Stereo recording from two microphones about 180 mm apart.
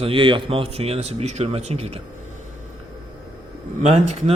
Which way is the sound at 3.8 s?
40° right (ahead or behind).